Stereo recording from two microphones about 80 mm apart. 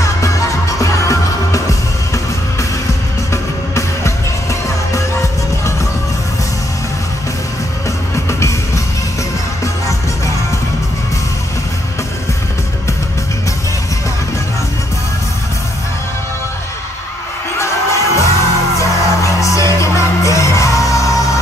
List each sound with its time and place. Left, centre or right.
0.0 s music: left
3.3 s music: left
8.3 s music: left
17.6 s music: left